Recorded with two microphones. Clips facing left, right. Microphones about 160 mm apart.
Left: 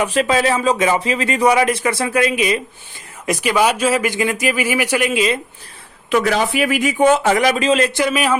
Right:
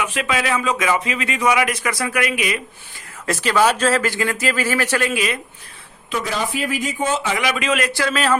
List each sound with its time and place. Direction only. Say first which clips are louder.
0.0 s speech: left 6 dB; 35° left (ahead or behind)
3.2 s speech: left 1 dB; 15° left (ahead or behind)
6.1 s speech: left 7 dB; 70° left (ahead or behind); by 8.4 s 15° left (ahead or behind)